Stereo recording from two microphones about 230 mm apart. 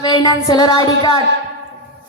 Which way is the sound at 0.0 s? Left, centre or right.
Centre.